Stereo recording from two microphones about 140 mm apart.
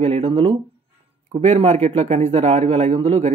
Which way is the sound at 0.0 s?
45° right (ahead or behind).